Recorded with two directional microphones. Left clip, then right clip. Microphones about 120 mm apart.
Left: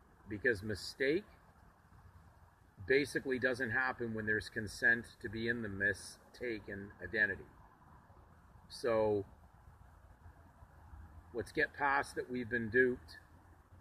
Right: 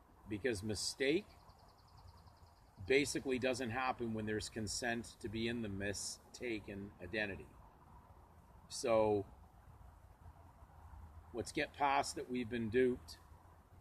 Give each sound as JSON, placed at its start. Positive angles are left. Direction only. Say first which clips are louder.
{"t": 0.3, "sound": "speech", "louder": "left 5 dB", "side_deg": -50}
{"t": 2.8, "sound": "speech", "louder": "left 2 dB", "side_deg": -50}
{"t": 8.6, "sound": "speech", "louder": "even", "side_deg": -50}
{"t": 11.4, "sound": "speech", "louder": "left 2 dB", "side_deg": -50}